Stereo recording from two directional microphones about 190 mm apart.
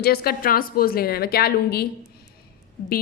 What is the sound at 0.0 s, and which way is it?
A woman's voice, 55° left (ahead or behind).